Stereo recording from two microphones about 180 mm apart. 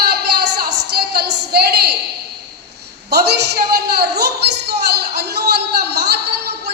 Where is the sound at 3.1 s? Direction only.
65° right (ahead or behind).